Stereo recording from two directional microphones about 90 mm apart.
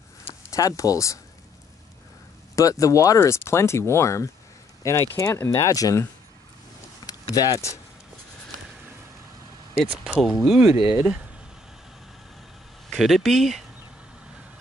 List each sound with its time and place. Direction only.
0.2 s speech: 40° left (ahead or behind)
2.5 s speech: 40° left (ahead or behind)
7.1 s speech: 45° left (ahead or behind)
10.0 s speech: 5° right (ahead or behind)
10.8 s speech: 20° right (ahead or behind)
12.9 s speech: centre (ahead or behind)